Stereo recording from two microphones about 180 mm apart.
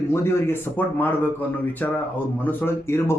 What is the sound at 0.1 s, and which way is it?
A man's voice, 15° left (ahead or behind).